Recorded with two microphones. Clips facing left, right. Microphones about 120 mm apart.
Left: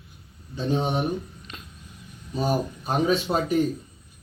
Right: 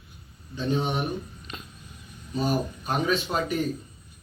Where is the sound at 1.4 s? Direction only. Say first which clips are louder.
Right 2 dB; 5° right (ahead or behind).